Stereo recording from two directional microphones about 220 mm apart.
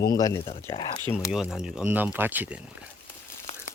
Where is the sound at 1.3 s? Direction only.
Centre (ahead or behind).